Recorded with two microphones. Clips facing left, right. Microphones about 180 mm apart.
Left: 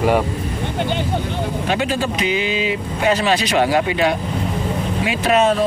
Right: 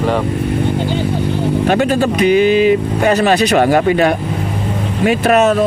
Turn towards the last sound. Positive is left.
turn(degrees=-45)  # may be behind; listen again after turning